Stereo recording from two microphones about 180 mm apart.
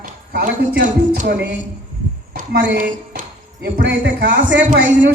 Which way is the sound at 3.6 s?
70° right (ahead or behind).